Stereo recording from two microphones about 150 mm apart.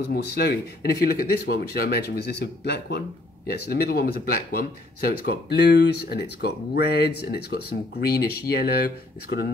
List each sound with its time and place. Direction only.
0.1 s speech: 90° left